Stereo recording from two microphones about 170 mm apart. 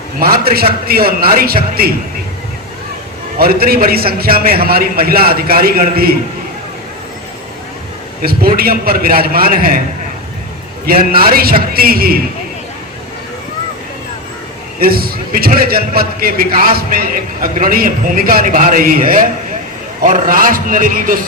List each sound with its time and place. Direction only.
0.2 s a man's voice: 60° right (ahead or behind)
3.3 s a man's voice: 60° right (ahead or behind)
8.2 s a man's voice: 65° right (ahead or behind)
10.8 s a man's voice: 60° right (ahead or behind)
14.8 s a man's voice: 60° right (ahead or behind)